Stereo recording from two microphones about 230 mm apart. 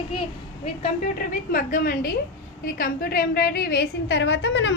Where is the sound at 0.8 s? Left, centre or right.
Left.